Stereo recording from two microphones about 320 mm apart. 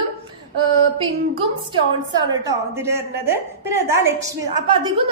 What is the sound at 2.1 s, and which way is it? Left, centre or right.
A woman's voice, centre.